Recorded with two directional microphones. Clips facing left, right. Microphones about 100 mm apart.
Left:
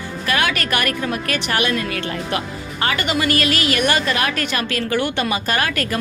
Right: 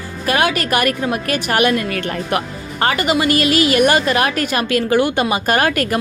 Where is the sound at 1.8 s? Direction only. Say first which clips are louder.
Right 3 dB; 35° right (ahead or behind).